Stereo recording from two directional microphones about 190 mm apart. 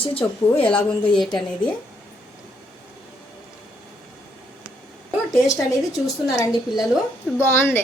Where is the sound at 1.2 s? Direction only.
Centre (ahead or behind).